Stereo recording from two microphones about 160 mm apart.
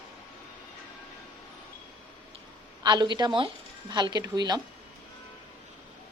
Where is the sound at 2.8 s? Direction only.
25° right (ahead or behind).